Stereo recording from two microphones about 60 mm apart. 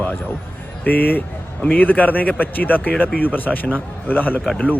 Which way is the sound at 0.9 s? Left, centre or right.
Left.